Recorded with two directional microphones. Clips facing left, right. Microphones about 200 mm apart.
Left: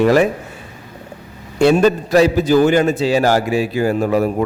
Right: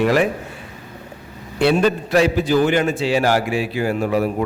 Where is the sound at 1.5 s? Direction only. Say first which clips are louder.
Left 4 dB; 45° left (ahead or behind).